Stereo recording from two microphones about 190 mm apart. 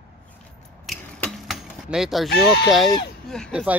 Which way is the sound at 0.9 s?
Centre (ahead or behind).